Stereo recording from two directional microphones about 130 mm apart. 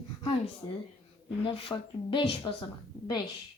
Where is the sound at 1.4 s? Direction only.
40° left (ahead or behind).